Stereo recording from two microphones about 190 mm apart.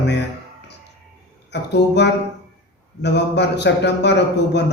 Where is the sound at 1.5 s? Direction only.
65° left (ahead or behind).